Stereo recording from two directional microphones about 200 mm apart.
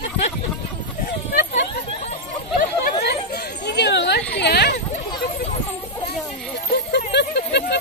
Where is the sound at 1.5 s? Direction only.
35° left (ahead or behind).